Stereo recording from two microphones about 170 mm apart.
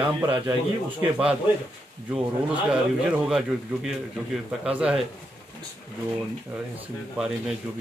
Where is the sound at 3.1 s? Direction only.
5° right (ahead or behind).